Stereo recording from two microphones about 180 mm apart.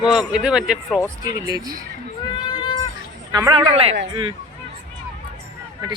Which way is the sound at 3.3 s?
20° right (ahead or behind).